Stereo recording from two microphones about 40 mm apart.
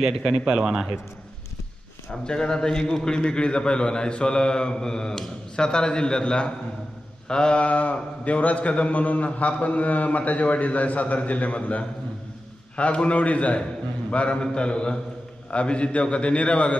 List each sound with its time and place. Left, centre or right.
0.0 s speech: centre
2.2 s speech: centre
7.6 s a man's voice: left